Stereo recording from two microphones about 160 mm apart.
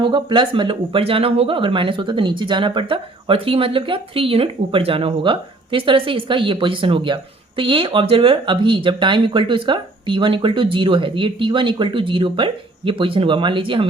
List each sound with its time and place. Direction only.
0.0 s speech: 30° right (ahead or behind)